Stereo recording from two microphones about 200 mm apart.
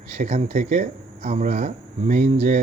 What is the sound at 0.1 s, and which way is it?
Speech, 35° right (ahead or behind).